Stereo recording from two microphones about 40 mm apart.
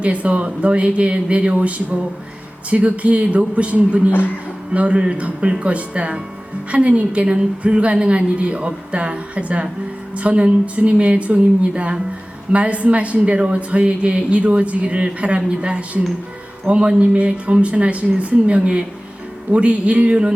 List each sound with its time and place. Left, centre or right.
0.0 s a woman's voice: right